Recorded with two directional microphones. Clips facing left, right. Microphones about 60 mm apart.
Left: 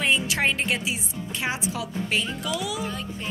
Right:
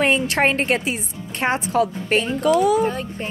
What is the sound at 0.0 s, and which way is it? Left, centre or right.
Speech, right.